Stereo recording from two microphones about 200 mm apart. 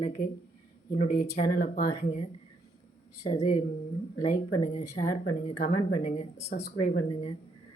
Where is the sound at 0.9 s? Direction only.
45° left (ahead or behind).